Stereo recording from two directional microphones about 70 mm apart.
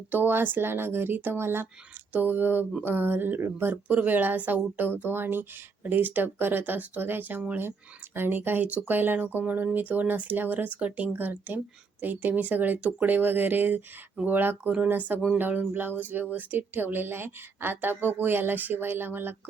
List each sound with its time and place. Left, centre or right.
0.1 s a woman's voice: right